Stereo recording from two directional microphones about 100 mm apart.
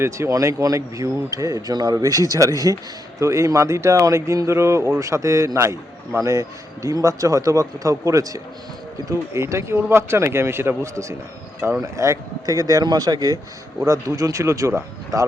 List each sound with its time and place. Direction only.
0.0 s speech: 30° right (ahead or behind)